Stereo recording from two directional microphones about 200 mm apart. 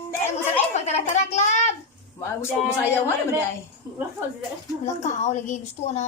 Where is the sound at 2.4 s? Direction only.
15° left (ahead or behind).